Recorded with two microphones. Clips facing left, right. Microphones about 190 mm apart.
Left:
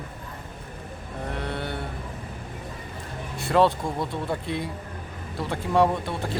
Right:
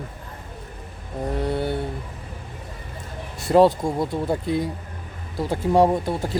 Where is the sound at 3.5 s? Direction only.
40° right (ahead or behind).